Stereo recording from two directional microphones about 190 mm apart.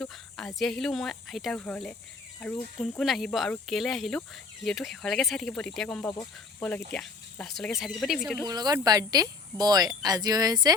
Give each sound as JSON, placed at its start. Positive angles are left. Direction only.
{"t": 0.0, "sound": "speech", "side_deg": 5}
{"t": 8.4, "sound": "speech", "side_deg": -20}